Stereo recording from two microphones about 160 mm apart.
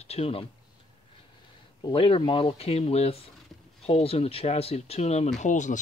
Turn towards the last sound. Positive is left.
turn(degrees=50)  # may be behind; listen again after turning